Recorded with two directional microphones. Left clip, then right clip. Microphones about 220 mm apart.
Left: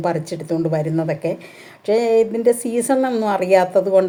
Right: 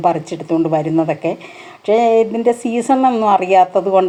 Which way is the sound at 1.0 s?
10° right (ahead or behind).